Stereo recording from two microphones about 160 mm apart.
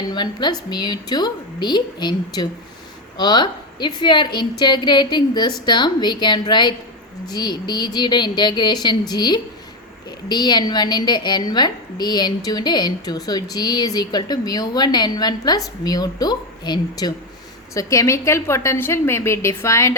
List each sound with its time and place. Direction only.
0.1 s a woman's voice: 25° left (ahead or behind)